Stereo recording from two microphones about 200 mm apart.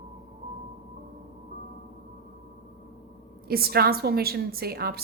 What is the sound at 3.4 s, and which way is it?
A woman's voice, 50° right (ahead or behind).